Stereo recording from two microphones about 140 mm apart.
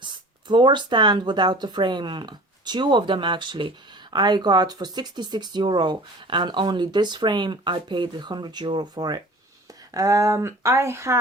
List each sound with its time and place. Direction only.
0.0 s speech: 35° right (ahead or behind)